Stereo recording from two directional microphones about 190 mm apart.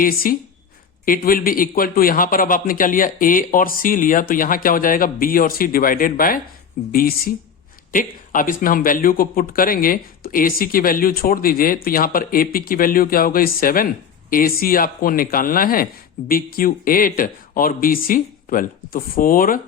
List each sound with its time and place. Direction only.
0.0 s speech: 50° left (ahead or behind)